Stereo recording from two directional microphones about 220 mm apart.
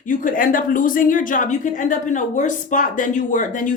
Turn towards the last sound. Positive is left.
turn(degrees=35)  # may be behind; listen again after turning